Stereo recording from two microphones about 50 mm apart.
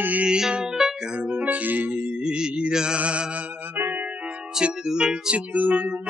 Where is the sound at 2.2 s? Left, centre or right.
Centre.